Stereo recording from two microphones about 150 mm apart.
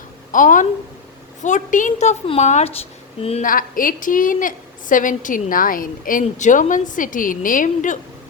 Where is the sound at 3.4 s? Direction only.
65° left (ahead or behind).